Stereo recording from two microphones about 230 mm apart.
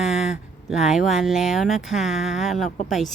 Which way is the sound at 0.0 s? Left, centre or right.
Centre.